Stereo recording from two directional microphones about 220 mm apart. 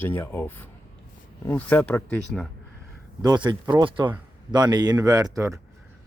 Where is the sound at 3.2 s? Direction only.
20° right (ahead or behind).